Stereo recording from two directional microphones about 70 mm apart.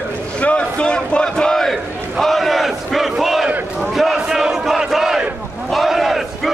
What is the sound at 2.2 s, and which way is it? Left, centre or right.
Battle cry, centre.